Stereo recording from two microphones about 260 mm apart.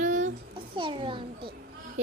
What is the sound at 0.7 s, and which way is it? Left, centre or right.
Speech, centre.